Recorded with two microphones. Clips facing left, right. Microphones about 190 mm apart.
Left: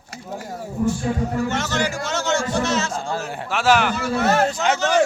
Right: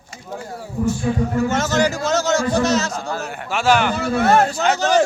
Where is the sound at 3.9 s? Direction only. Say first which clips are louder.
Right 3 dB; 55° right (ahead or behind).